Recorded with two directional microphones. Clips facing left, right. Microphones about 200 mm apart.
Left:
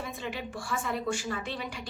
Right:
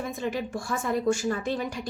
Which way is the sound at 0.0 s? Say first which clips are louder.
Right 6 dB; 40° right (ahead or behind).